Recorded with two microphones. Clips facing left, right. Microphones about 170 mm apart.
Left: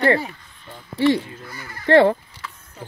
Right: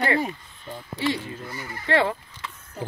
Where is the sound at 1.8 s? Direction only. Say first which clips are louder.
Left 9 dB; 50° left (ahead or behind).